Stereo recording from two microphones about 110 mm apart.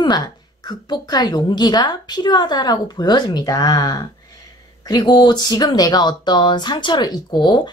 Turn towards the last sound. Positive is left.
turn(degrees=45)  # may be behind; listen again after turning